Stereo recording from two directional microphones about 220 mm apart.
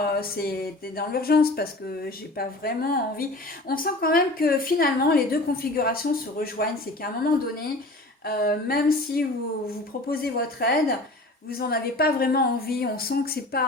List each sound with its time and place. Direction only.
0.0 s a woman's voice: 45° left (ahead or behind)
8.2 s a woman's voice: 45° left (ahead or behind)